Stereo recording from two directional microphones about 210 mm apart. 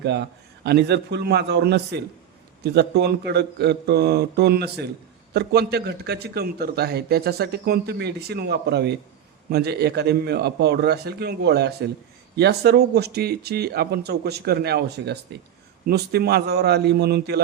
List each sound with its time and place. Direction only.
0.0 s a man's voice: 55° right (ahead or behind)